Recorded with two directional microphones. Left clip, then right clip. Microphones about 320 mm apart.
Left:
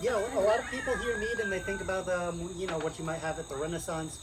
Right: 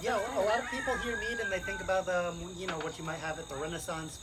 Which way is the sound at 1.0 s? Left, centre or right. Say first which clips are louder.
Left 3 dB; centre.